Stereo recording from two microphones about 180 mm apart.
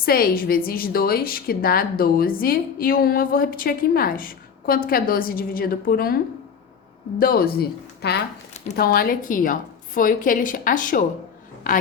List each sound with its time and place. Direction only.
0.0 s a woman's voice: 55° left (ahead or behind)
7.2 s a woman's voice: 55° left (ahead or behind)